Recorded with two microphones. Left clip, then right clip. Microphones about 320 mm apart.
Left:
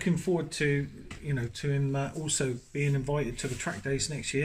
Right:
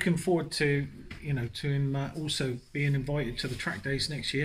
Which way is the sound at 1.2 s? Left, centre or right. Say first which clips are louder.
Left 1 dB; centre.